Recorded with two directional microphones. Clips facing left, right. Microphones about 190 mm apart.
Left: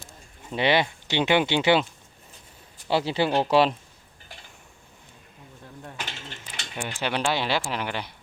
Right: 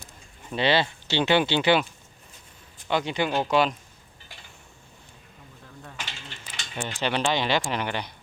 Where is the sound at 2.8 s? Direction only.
30° left (ahead or behind).